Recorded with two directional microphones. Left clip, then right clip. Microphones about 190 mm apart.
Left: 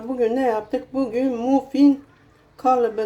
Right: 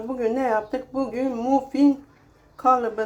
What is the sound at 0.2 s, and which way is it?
Speech, 15° left (ahead or behind).